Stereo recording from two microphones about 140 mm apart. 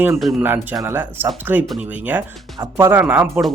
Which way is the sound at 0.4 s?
15° right (ahead or behind).